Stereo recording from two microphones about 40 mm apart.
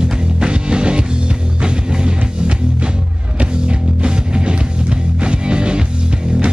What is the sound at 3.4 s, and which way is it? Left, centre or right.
Music, right.